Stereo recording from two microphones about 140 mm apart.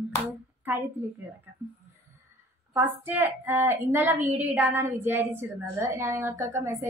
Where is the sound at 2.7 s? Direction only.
15° right (ahead or behind).